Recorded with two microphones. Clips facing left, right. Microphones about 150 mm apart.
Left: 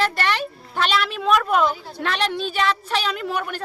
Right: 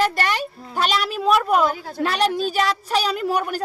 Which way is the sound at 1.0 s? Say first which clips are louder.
Right 3 dB; 5° right (ahead or behind).